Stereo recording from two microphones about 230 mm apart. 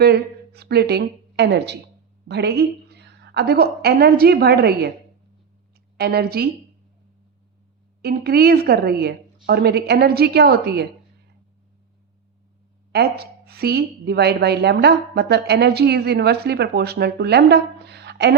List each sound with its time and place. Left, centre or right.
0.0 s a woman's voice: right
6.0 s a woman's voice: right
8.0 s a woman's voice: right
12.9 s a woman's voice: right